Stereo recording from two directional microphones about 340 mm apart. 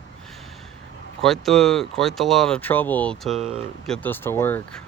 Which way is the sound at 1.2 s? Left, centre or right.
Centre.